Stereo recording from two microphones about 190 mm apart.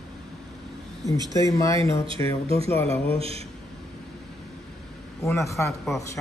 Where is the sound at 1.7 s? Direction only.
25° right (ahead or behind).